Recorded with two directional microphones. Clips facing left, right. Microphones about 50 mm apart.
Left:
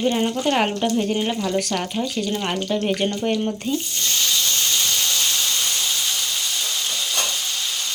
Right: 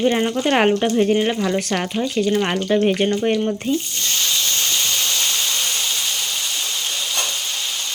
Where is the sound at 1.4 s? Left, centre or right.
Right.